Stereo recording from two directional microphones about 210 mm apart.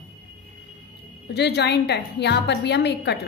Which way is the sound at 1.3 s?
55° left (ahead or behind).